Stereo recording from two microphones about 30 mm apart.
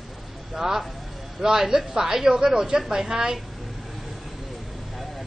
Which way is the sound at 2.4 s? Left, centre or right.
Right.